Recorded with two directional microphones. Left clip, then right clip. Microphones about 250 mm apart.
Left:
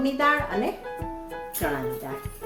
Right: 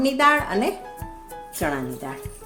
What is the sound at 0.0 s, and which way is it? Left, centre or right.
Speech, right.